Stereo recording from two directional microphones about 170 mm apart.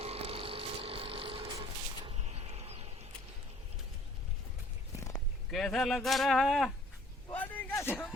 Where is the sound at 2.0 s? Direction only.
35° right (ahead or behind).